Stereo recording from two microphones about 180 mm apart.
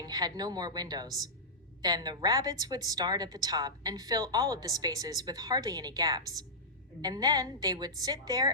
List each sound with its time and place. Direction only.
0.0 s a woman's voice: 20° right (ahead or behind)